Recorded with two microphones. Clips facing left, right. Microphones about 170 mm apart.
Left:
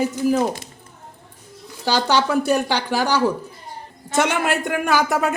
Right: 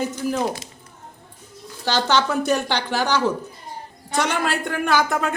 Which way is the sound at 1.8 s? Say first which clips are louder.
Left 1 dB; 10° left (ahead or behind).